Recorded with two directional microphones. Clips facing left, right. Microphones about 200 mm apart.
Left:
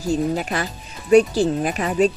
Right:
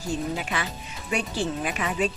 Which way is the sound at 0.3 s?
40° left (ahead or behind).